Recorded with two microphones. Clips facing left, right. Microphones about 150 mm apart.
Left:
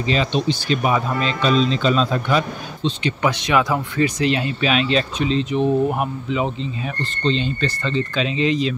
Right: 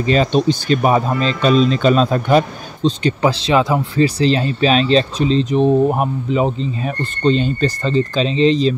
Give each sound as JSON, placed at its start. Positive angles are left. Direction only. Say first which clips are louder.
{"t": 0.0, "sound": "speech", "louder": "right 6 dB", "side_deg": -45}
{"t": 3.3, "sound": "speech", "louder": "right 3 dB", "side_deg": -30}